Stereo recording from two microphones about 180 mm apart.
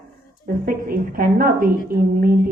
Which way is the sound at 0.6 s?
50° right (ahead or behind).